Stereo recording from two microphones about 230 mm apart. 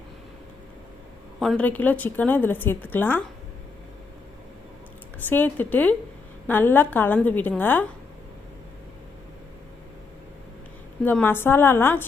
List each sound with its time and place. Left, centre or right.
1.4 s a woman's voice: centre
5.3 s a woman's voice: centre
11.0 s a woman's voice: centre